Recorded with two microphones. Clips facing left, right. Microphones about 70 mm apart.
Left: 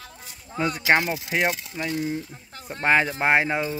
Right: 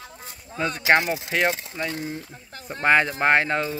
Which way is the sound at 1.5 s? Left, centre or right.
Right.